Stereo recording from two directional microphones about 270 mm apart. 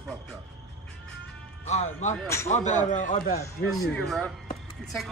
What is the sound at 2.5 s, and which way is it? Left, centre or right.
Speech, left.